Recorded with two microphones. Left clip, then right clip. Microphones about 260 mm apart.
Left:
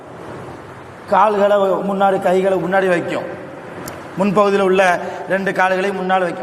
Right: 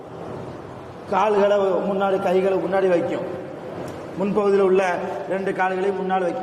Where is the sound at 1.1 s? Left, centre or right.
Left.